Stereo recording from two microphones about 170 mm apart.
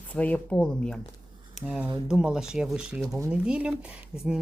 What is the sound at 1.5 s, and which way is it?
Speech, 5° right (ahead or behind).